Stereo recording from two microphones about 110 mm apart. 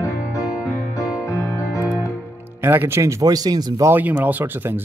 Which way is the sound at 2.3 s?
20° right (ahead or behind).